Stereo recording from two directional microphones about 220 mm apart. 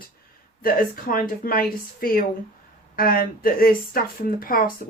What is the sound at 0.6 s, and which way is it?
Speech, 40° left (ahead or behind).